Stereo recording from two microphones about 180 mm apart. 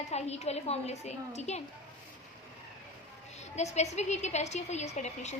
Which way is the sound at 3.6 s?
40° left (ahead or behind).